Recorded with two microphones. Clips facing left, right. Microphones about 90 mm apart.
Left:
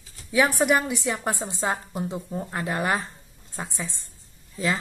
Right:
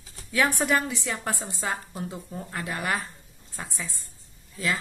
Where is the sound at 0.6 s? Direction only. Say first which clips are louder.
Left 3 dB; 15° left (ahead or behind).